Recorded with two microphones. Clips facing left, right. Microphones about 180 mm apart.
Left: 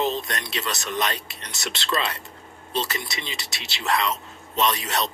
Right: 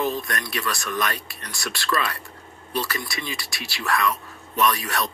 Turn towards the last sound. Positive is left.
turn(degrees=20)  # may be behind; listen again after turning